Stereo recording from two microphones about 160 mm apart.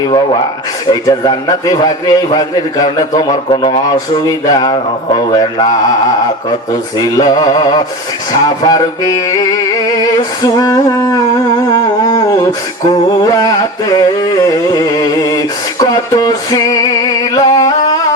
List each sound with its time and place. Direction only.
0.9 s a man's voice: 25° left (ahead or behind)
7.0 s a man's voice: 25° left (ahead or behind)
10.4 s a man's voice: 20° left (ahead or behind)
11.7 s a sound: 20° left (ahead or behind)